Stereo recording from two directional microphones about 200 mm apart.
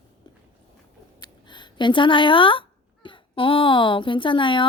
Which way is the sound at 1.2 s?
20° left (ahead or behind).